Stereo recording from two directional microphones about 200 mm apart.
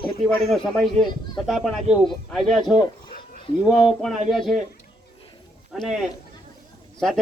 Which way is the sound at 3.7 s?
Centre (ahead or behind).